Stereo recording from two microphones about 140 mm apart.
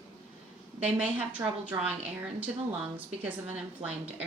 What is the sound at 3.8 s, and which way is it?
Speech, 40° right (ahead or behind).